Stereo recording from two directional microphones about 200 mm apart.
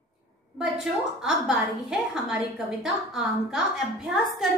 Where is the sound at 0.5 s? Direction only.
5° right (ahead or behind).